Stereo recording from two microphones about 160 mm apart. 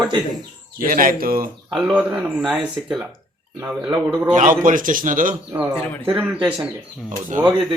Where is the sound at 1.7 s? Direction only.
5° right (ahead or behind).